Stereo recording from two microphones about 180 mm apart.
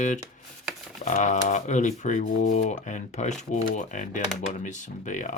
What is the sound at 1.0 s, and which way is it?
Speech, 45° left (ahead or behind).